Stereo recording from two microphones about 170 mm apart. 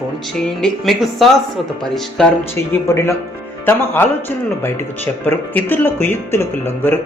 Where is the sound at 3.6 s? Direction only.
10° left (ahead or behind).